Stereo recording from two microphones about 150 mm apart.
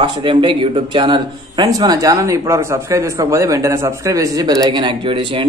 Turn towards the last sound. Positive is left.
turn(degrees=-35)  # may be behind; listen again after turning